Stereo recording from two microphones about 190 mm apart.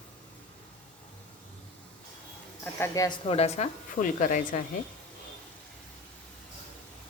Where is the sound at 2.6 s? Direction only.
10° left (ahead or behind).